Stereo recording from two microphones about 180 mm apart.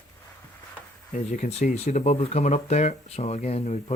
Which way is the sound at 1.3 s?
40° left (ahead or behind).